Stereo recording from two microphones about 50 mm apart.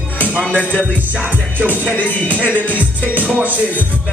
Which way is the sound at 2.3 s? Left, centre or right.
Right.